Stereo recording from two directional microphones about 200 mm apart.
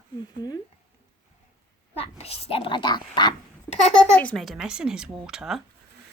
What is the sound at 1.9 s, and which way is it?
Speech, 30° left (ahead or behind).